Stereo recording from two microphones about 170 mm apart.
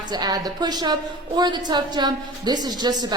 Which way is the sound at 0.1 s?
25° right (ahead or behind).